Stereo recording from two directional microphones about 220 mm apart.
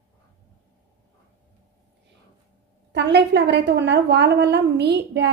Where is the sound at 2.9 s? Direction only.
50° right (ahead or behind).